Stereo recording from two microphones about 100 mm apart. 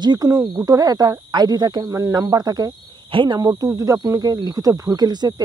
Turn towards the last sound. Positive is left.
turn(degrees=-45)  # may be behind; listen again after turning